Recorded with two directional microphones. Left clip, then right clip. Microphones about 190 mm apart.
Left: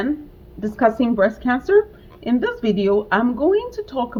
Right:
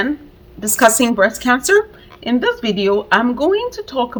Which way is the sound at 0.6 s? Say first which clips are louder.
Right 5 dB; 20° right (ahead or behind).